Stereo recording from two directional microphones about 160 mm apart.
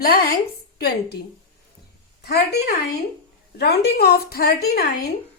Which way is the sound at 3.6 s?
80° left.